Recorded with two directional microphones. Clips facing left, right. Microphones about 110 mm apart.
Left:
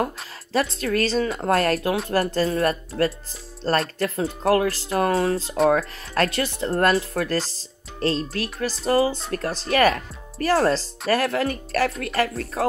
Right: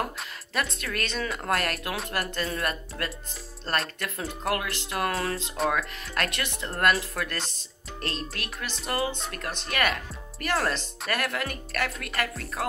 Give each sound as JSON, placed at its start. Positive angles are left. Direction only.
{"t": 0.0, "sound": "speech", "side_deg": 30}
{"t": 4.5, "sound": "speech", "side_deg": 35}